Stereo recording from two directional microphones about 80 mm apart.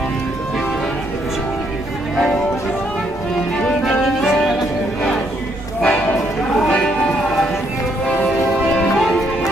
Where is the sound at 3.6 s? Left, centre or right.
Centre.